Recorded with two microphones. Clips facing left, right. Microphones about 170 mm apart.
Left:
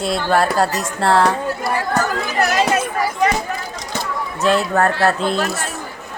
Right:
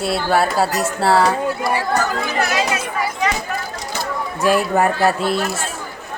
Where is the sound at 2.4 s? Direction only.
45° left (ahead or behind).